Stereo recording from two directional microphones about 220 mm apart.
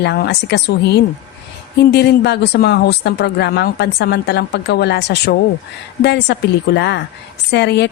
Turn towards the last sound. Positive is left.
turn(degrees=50)  # may be behind; listen again after turning